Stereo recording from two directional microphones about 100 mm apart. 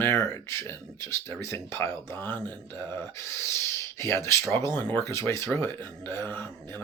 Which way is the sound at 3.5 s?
25° left (ahead or behind).